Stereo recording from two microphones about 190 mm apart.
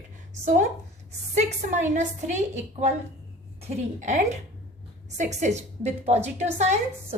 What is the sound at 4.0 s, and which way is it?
A woman's voice, 40° right (ahead or behind).